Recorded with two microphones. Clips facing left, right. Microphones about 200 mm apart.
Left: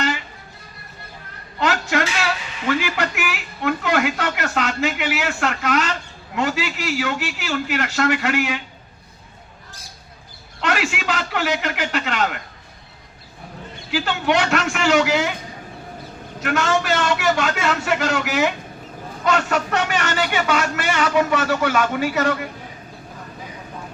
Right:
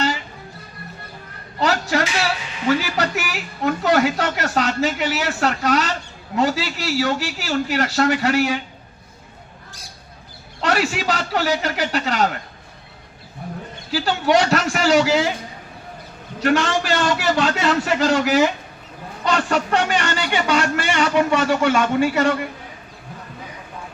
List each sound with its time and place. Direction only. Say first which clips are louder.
1.5 s a sound: right 1 dB; 35° right (ahead or behind)
2.9 s a woman's voice: right 1 dB; 35° right (ahead or behind)
10.6 s a man's voice: right 2 dB; 35° right (ahead or behind)
13.9 s a woman's voice: right 3 dB; 35° right (ahead or behind)
16.4 s a woman's voice: right 2 dB; 30° right (ahead or behind)